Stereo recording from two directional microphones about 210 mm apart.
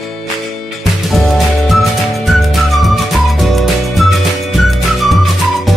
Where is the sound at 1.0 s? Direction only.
Centre (ahead or behind).